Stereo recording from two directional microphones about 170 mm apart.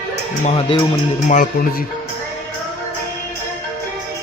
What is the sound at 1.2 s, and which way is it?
Speech, 50° left (ahead or behind).